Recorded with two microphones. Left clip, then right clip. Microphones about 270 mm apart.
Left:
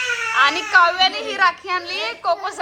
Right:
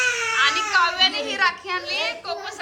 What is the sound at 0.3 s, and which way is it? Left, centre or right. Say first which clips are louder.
A woman's voice: left 6 dB; centre.